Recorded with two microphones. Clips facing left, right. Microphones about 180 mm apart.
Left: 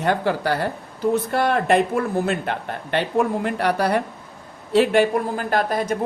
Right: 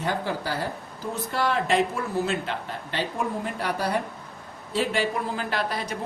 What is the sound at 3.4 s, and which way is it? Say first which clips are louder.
Speech: left 7 dB; 70° left (ahead or behind).